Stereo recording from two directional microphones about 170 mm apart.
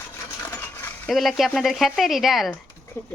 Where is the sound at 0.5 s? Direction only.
15° left (ahead or behind).